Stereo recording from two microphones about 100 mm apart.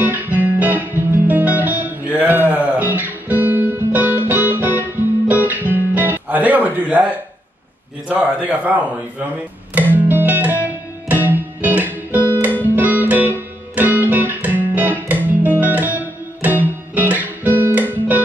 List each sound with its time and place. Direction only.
0.0 s guitar: 20° right (ahead or behind)
8.1 s a man's voice: 15° right (ahead or behind)
9.8 s music: 20° right (ahead or behind)